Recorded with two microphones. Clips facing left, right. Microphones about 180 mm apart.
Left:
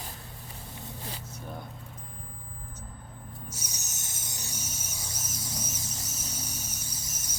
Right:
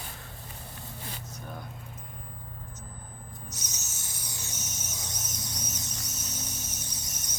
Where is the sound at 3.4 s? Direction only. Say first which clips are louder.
Left 1 dB; 10° left (ahead or behind).